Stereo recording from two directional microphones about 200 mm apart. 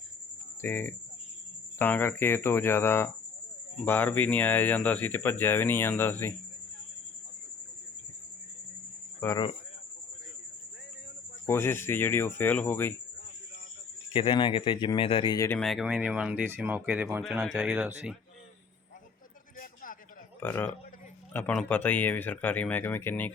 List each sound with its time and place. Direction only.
0.6 s speech: 10° left (ahead or behind)
9.2 s speech: 15° left (ahead or behind)
11.4 s speech: 10° left (ahead or behind)
14.1 s speech: 25° left (ahead or behind)
15.5 s speech: centre (ahead or behind)
19.5 s a sound: 45° left (ahead or behind)
20.4 s a man's voice: 10° left (ahead or behind)